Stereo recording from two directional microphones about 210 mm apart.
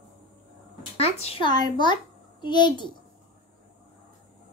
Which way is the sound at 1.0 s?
30° left (ahead or behind).